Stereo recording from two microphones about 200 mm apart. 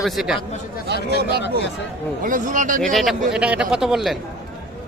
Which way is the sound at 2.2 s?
40° right (ahead or behind).